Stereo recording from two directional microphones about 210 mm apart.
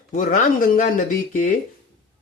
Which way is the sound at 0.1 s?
40° left (ahead or behind).